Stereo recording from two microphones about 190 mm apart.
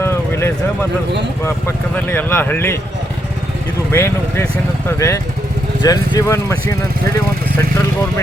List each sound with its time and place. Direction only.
0.0 s vehicle: 15° left (ahead or behind)
1.5 s speech: 10° left (ahead or behind)
3.9 s speech: 15° left (ahead or behind)